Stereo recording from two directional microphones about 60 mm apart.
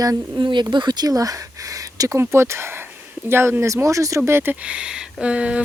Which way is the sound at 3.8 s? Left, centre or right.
Right.